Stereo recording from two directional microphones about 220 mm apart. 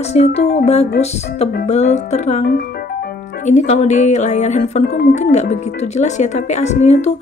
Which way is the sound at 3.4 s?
30° left (ahead or behind).